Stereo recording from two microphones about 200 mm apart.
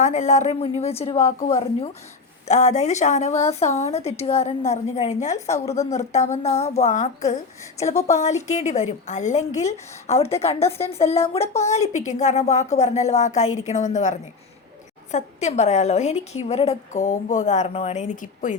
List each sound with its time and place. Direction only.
0.0 s a woman's voice: 35° left (ahead or behind)
5.5 s speech: 15° left (ahead or behind)
5.8 s a woman's voice: 35° left (ahead or behind)